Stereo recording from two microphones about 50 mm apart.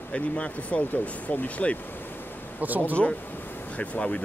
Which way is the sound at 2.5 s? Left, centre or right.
Right.